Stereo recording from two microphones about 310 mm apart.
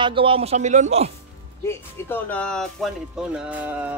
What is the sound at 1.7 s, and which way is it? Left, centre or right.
Speech, centre.